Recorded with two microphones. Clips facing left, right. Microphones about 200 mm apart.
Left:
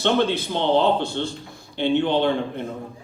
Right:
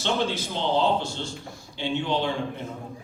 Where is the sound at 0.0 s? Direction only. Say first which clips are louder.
Left 6 dB; 60° left (ahead or behind).